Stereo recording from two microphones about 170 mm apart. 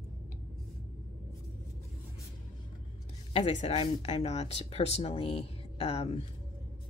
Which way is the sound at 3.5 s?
40° left (ahead or behind).